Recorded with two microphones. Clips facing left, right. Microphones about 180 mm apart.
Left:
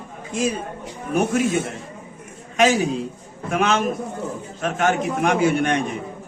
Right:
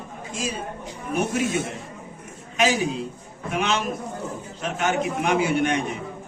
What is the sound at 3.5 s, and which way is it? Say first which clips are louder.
A man's voice: left 5 dB; 50° left (ahead or behind).